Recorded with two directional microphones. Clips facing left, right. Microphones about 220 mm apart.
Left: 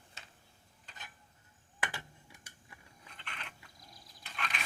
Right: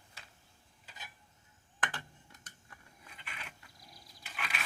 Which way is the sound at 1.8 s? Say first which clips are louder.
Right 1 dB; 10° left (ahead or behind).